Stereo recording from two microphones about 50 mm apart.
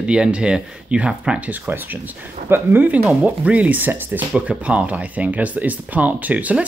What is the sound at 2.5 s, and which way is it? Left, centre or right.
Speech, right.